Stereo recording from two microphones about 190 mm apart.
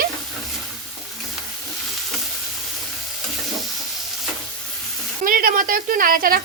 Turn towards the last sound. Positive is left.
turn(degrees=-50)  # may be behind; listen again after turning